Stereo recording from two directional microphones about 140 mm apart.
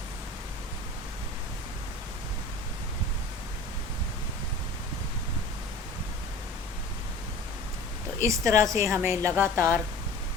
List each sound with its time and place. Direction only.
8.2 s a woman's voice: 20° right (ahead or behind)